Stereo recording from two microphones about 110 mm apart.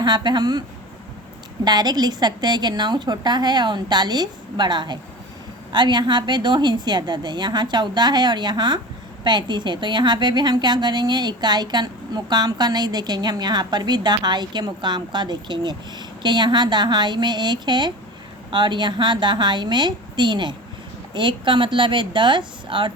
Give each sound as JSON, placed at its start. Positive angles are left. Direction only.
{"t": 0.0, "sound": "a woman's voice", "side_deg": -40}
{"t": 1.6, "sound": "a woman's voice", "side_deg": -40}